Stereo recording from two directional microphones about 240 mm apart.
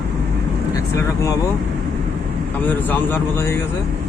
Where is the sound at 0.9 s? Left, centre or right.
Centre.